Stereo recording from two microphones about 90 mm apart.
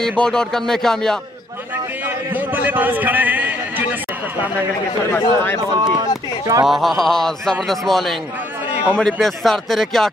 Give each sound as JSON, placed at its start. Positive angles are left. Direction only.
{"t": 0.2, "sound": "speech", "side_deg": 5}
{"t": 2.0, "sound": "a sound", "side_deg": -20}
{"t": 5.1, "sound": "a man's voice", "side_deg": 25}
{"t": 5.8, "sound": "speech", "side_deg": -55}
{"t": 6.6, "sound": "speech", "side_deg": 0}